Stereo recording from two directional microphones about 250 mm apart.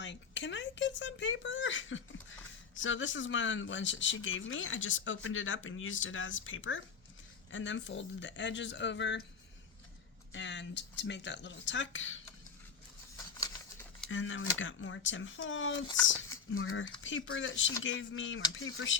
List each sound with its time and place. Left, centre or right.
0.0 s speech: left
10.3 s speech: left
13.1 s a sound: centre
14.1 s speech: left